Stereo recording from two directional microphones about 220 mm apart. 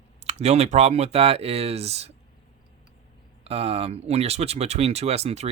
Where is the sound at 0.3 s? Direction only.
30° right (ahead or behind).